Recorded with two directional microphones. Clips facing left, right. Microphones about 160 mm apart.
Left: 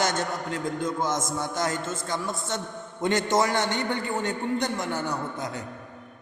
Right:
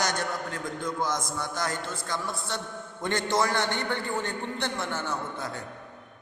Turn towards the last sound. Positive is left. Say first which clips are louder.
# left 2 dB
turn(degrees=15)  # may be behind; listen again after turning